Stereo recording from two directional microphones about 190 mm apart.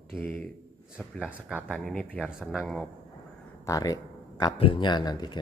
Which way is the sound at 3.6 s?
20° left (ahead or behind).